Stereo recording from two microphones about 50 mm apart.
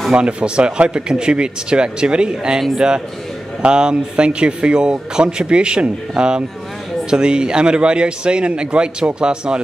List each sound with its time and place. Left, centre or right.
0.1 s speech: right
3.6 s speech: centre